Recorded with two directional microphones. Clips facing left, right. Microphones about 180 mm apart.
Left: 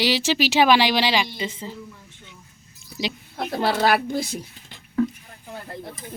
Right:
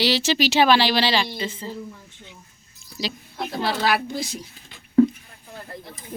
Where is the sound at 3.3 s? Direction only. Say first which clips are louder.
Left 3 dB; 50° left (ahead or behind).